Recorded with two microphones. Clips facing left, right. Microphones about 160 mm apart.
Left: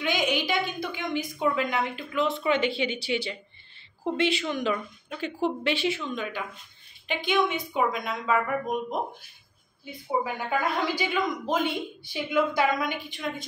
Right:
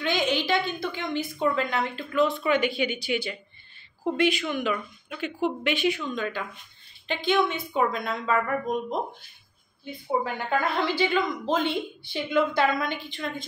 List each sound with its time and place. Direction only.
0.0 s a woman's voice: 10° left (ahead or behind)
7.1 s a woman's voice: 15° left (ahead or behind)
10.2 s a woman's voice: 10° left (ahead or behind)